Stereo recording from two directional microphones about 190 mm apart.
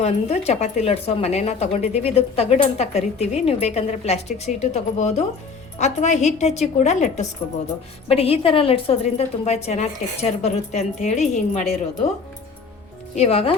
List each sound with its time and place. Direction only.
0.0 s speech: 35° left (ahead or behind)
13.1 s speech: 30° left (ahead or behind)